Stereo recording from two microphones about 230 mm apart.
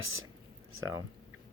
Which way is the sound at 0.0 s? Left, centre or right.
Right.